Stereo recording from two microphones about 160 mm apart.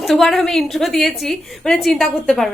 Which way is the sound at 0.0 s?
Centre (ahead or behind).